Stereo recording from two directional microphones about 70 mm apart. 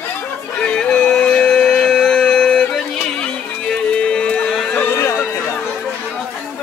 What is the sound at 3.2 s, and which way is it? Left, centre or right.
Music, centre.